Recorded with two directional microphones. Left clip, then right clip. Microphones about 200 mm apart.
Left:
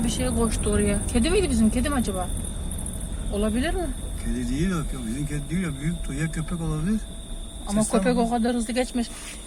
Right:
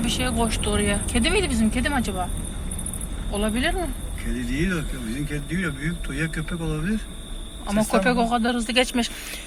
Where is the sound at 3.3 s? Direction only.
25° left (ahead or behind).